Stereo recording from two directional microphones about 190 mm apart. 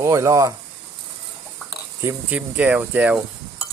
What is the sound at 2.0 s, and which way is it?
Speech, 10° right (ahead or behind).